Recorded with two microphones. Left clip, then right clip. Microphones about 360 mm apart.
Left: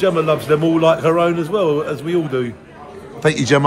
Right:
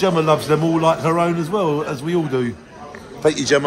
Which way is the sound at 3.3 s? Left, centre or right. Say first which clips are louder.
Left 3 dB; centre.